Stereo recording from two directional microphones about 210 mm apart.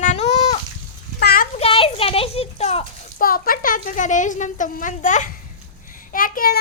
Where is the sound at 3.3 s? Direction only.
40° left (ahead or behind).